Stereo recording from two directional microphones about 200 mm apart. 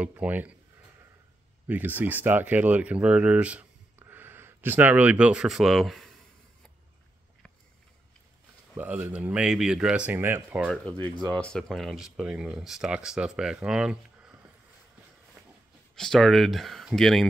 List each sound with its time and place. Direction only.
0.0 s speech: 10° right (ahead or behind)
1.7 s speech: 10° right (ahead or behind)
8.7 s speech: 10° right (ahead or behind)
10.8 s speech: 5° left (ahead or behind)
16.0 s speech: centre (ahead or behind)